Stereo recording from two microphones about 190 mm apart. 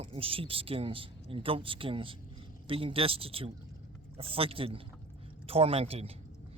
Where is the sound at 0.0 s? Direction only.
30° right (ahead or behind).